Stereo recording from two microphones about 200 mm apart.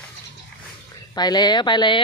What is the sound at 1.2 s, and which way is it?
Speech, 20° left (ahead or behind).